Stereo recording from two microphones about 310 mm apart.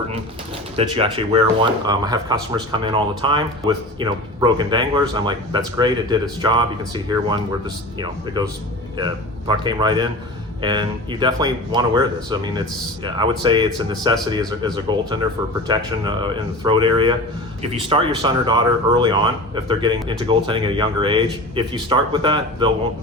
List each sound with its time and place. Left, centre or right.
0.8 s speech: centre